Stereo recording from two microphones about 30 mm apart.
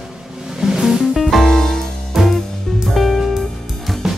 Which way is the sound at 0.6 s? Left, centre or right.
Centre.